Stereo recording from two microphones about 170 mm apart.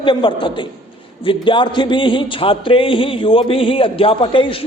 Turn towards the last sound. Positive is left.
turn(degrees=30)  # may be behind; listen again after turning